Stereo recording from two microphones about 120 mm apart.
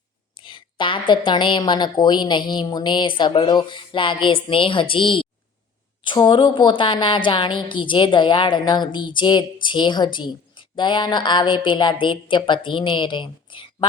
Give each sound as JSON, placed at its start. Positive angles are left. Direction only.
{"t": 0.4, "sound": "a woman's voice", "side_deg": 45}